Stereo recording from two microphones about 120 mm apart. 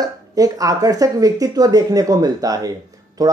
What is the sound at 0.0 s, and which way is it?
Speech, 30° right (ahead or behind).